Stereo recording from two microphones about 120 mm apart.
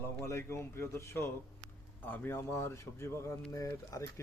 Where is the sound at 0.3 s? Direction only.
25° left (ahead or behind).